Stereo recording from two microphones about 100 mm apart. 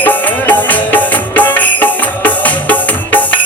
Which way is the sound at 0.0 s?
15° left (ahead or behind).